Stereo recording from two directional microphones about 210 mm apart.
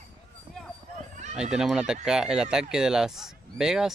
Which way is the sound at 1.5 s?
5° right (ahead or behind).